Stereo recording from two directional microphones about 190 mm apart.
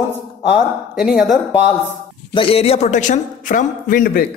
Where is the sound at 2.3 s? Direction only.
30° left (ahead or behind).